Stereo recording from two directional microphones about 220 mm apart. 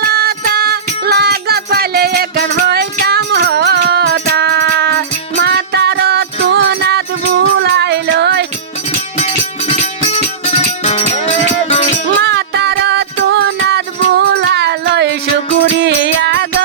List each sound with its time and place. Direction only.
0.0 s music: 45° right (ahead or behind)
10.4 s music: 30° left (ahead or behind)
12.0 s music: 50° right (ahead or behind)